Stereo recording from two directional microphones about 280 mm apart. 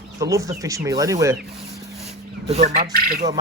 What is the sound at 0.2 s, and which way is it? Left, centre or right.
A man's voice, centre.